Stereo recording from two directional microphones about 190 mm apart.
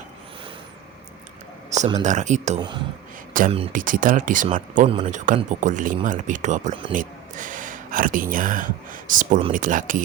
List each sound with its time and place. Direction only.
2.0 s speech: 40° right (ahead or behind)
2.6 s speech: 25° right (ahead or behind)
3.3 s speech: 45° right (ahead or behind)